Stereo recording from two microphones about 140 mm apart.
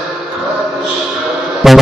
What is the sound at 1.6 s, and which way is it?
Speech, centre (ahead or behind).